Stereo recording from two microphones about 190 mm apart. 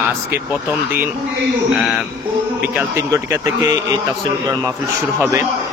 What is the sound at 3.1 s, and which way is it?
Speech, 15° right (ahead or behind).